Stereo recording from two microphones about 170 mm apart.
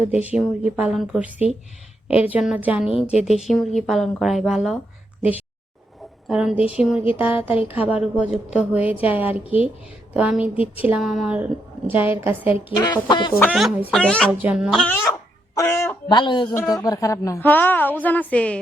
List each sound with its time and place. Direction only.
0.2 s a woman's voice: 10° right (ahead or behind)
2.9 s a woman's voice: 40° left (ahead or behind)
3.4 s a woman's voice: centre (ahead or behind)
6.2 s a woman's voice: 5° right (ahead or behind)
12.7 s speech: 20° left (ahead or behind)
13.5 s a woman's voice: centre (ahead or behind)
13.9 s a woman's voice: 5° left (ahead or behind)
14.3 s a woman's voice: 10° right (ahead or behind); by 16.0 s 15° left (ahead or behind)
16.0 s a woman's voice: 25° left (ahead or behind); by 18.6 s 5° left (ahead or behind)